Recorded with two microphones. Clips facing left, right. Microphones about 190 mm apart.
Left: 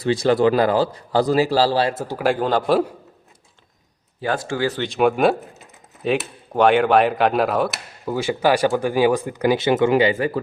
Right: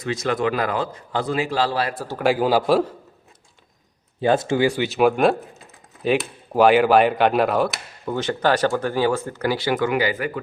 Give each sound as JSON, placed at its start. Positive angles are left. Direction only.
{"t": 0.0, "sound": "a man's voice", "side_deg": 30}
{"t": 2.1, "sound": "a man's voice", "side_deg": 0}
{"t": 4.2, "sound": "speech", "side_deg": -20}